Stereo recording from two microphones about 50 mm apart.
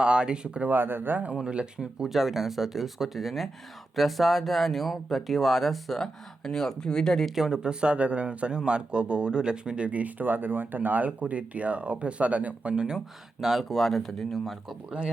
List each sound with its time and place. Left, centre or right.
0.0 s speech: centre
0.6 s speech: right
1.5 s speech: centre
2.0 s speech: centre
7.3 s speech: centre
7.6 s speech: centre
12.7 s speech: centre
13.4 s speech: centre